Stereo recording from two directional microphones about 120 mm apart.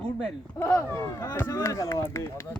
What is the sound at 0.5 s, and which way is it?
Speech, 20° left (ahead or behind).